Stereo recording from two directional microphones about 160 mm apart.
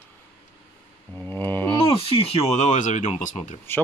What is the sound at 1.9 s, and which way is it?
Speech, 35° left (ahead or behind).